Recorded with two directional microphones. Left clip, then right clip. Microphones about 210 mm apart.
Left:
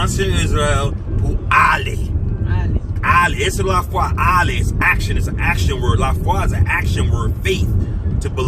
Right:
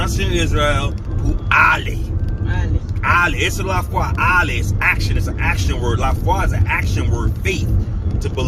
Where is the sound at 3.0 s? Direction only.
15° left (ahead or behind).